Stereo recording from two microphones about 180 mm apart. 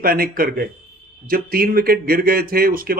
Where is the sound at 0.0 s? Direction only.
55° right (ahead or behind).